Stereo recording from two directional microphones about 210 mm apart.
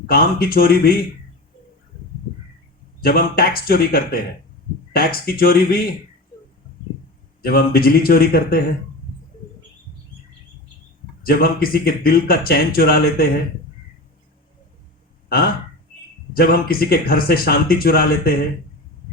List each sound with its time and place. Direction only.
0.1 s speech: 45° left (ahead or behind)
3.0 s speech: 45° left (ahead or behind)
7.4 s speech: 45° left (ahead or behind)
11.3 s speech: 45° left (ahead or behind)
16.3 s speech: 45° left (ahead or behind)